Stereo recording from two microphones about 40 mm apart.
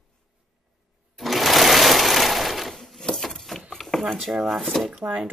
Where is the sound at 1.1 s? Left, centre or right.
Centre.